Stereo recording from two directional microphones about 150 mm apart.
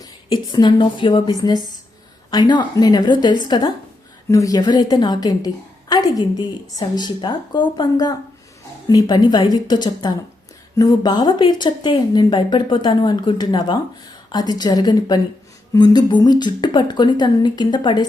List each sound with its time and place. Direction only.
0.0 s speech: 30° left (ahead or behind)